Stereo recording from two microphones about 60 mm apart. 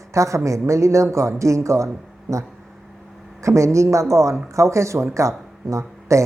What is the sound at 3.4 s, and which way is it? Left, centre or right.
Speech, right.